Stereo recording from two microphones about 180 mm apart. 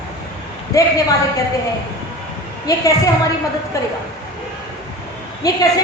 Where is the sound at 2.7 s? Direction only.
20° left (ahead or behind).